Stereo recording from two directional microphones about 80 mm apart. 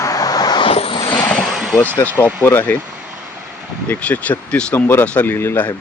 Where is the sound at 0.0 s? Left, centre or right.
Left.